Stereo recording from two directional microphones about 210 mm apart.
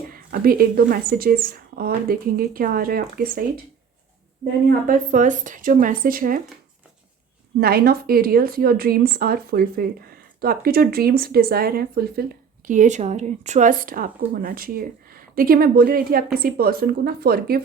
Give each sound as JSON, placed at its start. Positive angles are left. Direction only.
{"t": 0.1, "sound": "a woman's voice", "side_deg": -45}
{"t": 4.9, "sound": "speech", "side_deg": -35}
{"t": 7.6, "sound": "a woman's voice", "side_deg": -45}